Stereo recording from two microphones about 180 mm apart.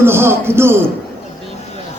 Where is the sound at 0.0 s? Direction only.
15° right (ahead or behind).